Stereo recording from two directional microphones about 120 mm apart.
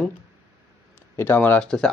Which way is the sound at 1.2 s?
15° left (ahead or behind).